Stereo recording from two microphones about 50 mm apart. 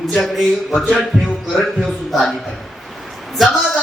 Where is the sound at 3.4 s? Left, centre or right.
Centre.